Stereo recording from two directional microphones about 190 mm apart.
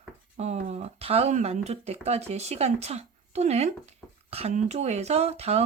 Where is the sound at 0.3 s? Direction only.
35° right (ahead or behind).